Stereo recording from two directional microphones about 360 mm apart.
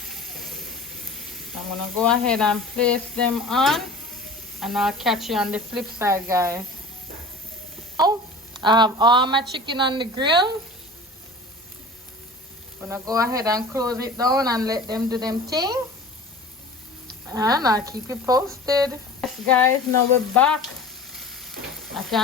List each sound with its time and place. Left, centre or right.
0.1 s sizzle: centre
4.6 s speech: centre
8.5 s a woman's voice: centre
12.8 s a woman's voice: centre
17.2 s a woman's voice: centre
19.2 s speech: centre
21.1 s a sound: centre